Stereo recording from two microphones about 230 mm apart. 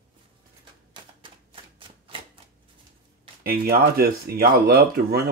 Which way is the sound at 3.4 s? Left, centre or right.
Right.